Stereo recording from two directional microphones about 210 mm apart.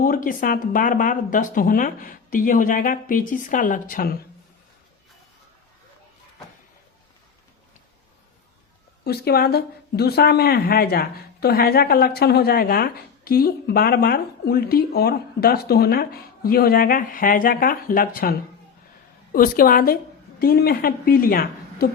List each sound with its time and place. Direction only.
0.0 s speech: 40° left (ahead or behind)
9.0 s speech: 50° left (ahead or behind)